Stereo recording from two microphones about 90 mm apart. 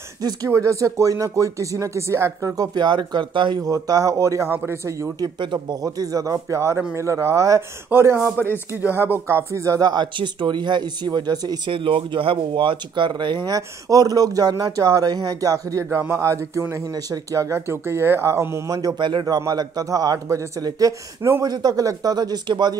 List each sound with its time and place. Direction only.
0.2 s speech: 45° right (ahead or behind)
0.5 s speech: 35° right (ahead or behind); by 3.6 s 60° right (ahead or behind)
3.6 s speech: 40° right (ahead or behind)
5.2 s speech: 55° right (ahead or behind)
5.8 s a man's voice: 40° right (ahead or behind)
8.2 s a man's voice: 25° left (ahead or behind)
8.8 s speech: 20° right (ahead or behind); by 11.7 s 50° right (ahead or behind)
11.7 s speech: 75° right (ahead or behind); by 13.6 s 60° right (ahead or behind)
13.6 s speech: 40° right (ahead or behind)
18.9 s speech: 60° right (ahead or behind)
19.2 s speech: 45° right (ahead or behind)